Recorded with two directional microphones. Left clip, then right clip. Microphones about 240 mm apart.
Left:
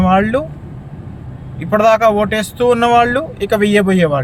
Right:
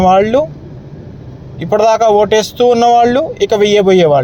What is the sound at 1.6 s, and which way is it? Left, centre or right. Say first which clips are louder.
Speech: right 1 dB; right.